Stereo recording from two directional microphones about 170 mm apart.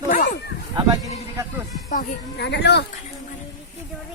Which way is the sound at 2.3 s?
85° left.